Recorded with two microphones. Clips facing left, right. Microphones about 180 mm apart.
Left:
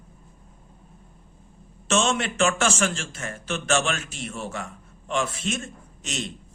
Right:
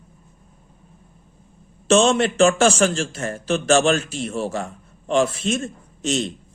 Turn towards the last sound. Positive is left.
turn(degrees=-35)  # may be behind; listen again after turning